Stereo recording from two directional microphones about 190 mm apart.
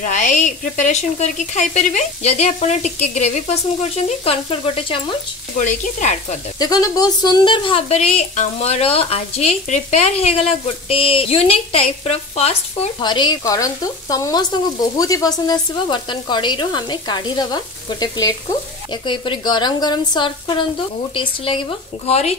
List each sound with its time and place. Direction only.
0.0 s speech: 40° left (ahead or behind)
5.6 s speech: 40° left (ahead or behind)
6.6 s speech: 20° left (ahead or behind)
13.0 s speech: 25° left (ahead or behind)